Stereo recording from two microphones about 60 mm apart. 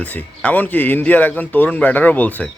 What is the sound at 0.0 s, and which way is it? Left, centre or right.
Speech, left.